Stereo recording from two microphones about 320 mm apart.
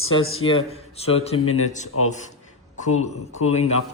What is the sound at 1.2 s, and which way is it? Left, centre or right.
Speech, centre.